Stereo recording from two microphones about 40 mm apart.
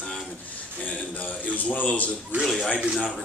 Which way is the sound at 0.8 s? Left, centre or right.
Left.